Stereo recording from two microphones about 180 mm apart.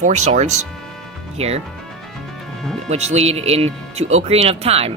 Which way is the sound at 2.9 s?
35° right (ahead or behind).